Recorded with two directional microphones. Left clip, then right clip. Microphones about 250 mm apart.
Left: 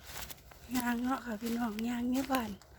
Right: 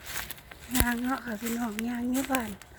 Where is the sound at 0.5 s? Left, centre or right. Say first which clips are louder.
Right 6 dB; centre.